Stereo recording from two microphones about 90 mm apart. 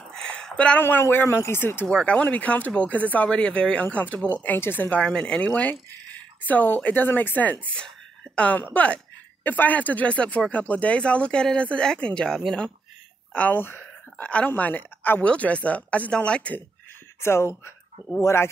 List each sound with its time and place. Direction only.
0.1 s a sound: 10° left (ahead or behind)
0.8 s speech: 25° left (ahead or behind)
1.9 s speech: 10° left (ahead or behind)
5.0 s speech: 10° left (ahead or behind)
17.2 s speech: 30° left (ahead or behind)